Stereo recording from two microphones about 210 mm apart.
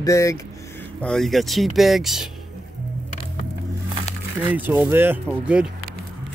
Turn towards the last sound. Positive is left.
turn(degrees=-5)  # may be behind; listen again after turning